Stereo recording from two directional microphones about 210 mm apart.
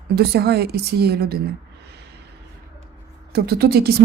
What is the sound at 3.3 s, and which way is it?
Speech, 50° right (ahead or behind).